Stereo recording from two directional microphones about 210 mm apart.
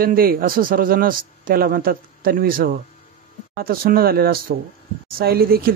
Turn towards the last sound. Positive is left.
turn(degrees=-45)  # may be behind; listen again after turning